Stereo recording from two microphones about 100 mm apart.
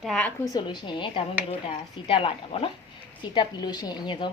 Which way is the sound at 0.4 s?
45° left (ahead or behind).